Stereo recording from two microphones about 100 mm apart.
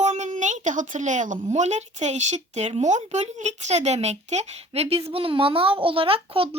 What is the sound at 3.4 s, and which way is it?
Speech, 90° right.